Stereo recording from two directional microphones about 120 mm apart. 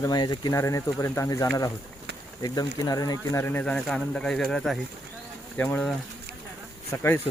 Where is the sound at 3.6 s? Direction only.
5° left (ahead or behind).